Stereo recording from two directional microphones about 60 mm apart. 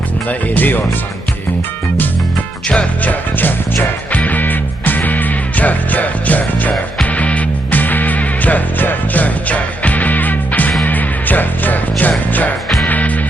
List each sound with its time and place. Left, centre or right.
0.3 s speech: left
2.6 s music: left